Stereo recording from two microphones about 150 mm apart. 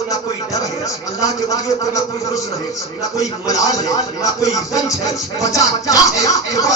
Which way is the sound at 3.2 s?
25° left (ahead or behind).